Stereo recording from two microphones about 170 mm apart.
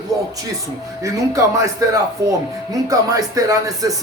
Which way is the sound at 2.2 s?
20° right (ahead or behind).